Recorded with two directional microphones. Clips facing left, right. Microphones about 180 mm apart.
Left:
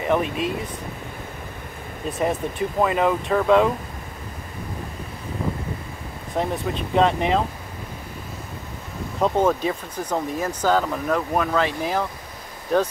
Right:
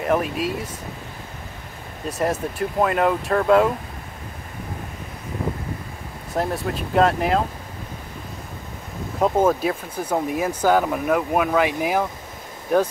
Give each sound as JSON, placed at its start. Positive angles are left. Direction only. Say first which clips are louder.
{"t": 0.0, "sound": "speech", "louder": "even", "side_deg": 0}
{"t": 2.0, "sound": "speech", "louder": "even", "side_deg": 0}
{"t": 6.3, "sound": "speech", "louder": "even", "side_deg": 0}
{"t": 9.2, "sound": "speech", "louder": "right 1 dB", "side_deg": -5}